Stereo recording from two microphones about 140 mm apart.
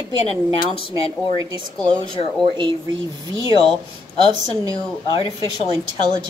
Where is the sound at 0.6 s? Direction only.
35° left (ahead or behind).